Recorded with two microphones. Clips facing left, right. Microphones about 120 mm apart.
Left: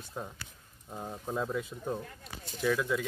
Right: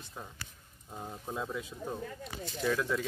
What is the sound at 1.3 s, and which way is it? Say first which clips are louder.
Speech: left 4 dB; centre (ahead or behind).